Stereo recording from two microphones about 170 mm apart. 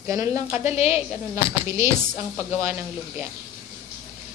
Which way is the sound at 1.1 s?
15° right (ahead or behind).